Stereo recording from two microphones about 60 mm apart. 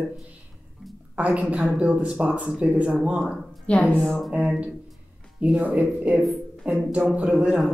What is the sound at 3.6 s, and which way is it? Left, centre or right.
Speech, centre.